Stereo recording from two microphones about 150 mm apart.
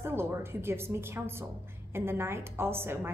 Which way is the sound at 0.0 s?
15° right (ahead or behind).